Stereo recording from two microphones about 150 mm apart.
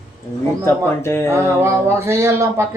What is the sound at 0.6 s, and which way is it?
Speech, 15° left (ahead or behind).